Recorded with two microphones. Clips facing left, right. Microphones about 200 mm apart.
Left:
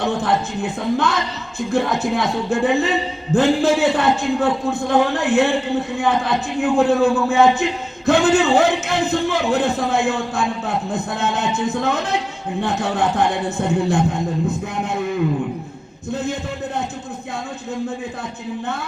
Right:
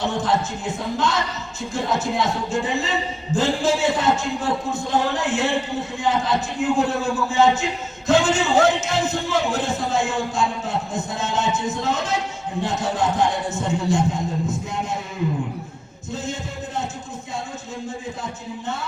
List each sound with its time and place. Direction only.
0.0 s a man's voice: 60° left (ahead or behind)